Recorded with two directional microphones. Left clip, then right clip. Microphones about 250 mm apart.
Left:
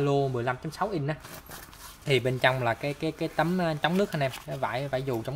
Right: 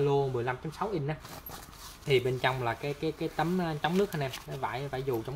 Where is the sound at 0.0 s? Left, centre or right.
Left.